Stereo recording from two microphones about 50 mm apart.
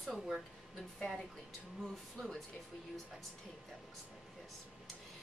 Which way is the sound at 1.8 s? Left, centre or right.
Centre.